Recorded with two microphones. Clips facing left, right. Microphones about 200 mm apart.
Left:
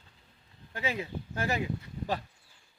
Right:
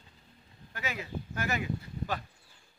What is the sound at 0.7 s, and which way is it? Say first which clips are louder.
Speech: left 4 dB; 30° left (ahead or behind).